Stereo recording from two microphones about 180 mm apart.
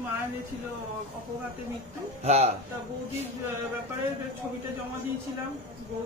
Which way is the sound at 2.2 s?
40° right (ahead or behind).